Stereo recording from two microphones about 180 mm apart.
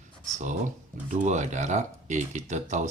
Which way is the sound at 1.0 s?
40° right (ahead or behind).